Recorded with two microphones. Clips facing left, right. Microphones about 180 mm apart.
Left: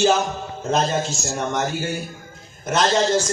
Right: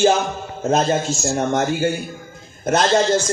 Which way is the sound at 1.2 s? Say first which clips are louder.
Right 5 dB; 50° right (ahead or behind).